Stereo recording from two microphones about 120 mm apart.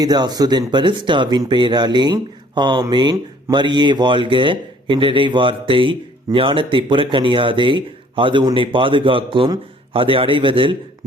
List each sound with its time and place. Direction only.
0.0 s speech: 35° right (ahead or behind)